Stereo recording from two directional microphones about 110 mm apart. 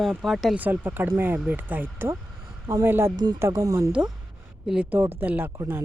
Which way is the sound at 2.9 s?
20° right (ahead or behind).